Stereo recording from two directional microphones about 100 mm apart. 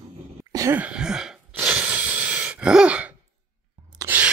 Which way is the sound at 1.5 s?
15° right (ahead or behind).